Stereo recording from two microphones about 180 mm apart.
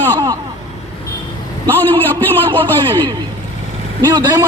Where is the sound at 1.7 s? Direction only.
10° left (ahead or behind).